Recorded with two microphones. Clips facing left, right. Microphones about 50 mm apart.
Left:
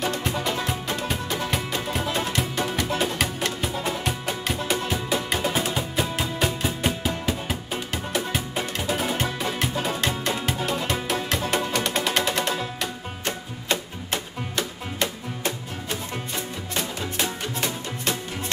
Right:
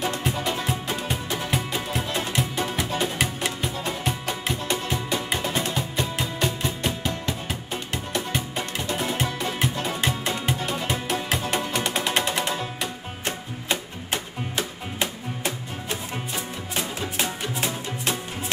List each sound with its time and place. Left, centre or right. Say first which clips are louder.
0.0 s music: even; centre
12.8 s music: left 1 dB; centre